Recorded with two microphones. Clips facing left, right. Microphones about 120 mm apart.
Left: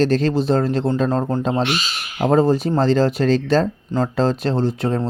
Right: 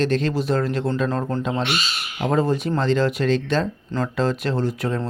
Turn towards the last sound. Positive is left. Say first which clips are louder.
# left 4 dB
turn(degrees=30)  # may be behind; listen again after turning